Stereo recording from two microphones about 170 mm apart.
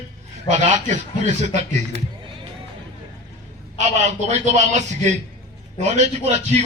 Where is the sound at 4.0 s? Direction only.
45° right (ahead or behind).